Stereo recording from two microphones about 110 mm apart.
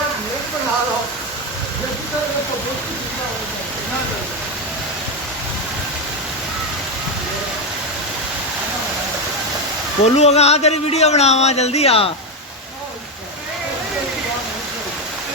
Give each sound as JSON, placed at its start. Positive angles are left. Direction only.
{"t": 10.0, "sound": "speech", "side_deg": 75}